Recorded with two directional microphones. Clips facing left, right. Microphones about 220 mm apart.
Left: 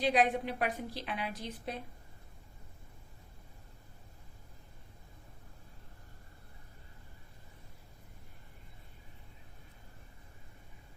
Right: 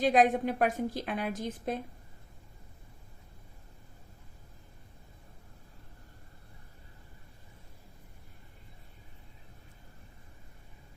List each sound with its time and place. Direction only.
0.0 s a woman's voice: 45° right (ahead or behind)